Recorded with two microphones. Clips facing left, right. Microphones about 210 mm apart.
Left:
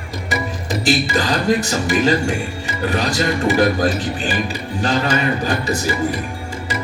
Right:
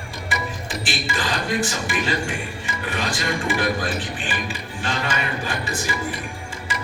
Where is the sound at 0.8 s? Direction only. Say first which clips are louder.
Left 10 dB; 40° left (ahead or behind).